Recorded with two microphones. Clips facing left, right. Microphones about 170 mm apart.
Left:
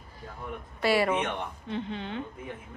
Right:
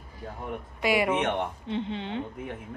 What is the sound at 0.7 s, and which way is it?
A woman's voice, 15° right (ahead or behind).